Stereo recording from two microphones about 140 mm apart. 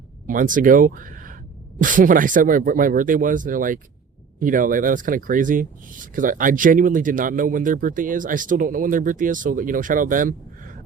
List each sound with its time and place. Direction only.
0.3 s speech: 75° right (ahead or behind)